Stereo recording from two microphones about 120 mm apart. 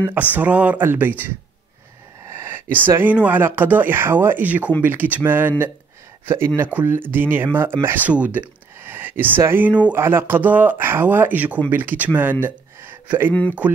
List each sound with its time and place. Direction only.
0.1 s speech: 15° right (ahead or behind)
2.2 s speech: 20° right (ahead or behind)
13.3 s speech: 10° left (ahead or behind)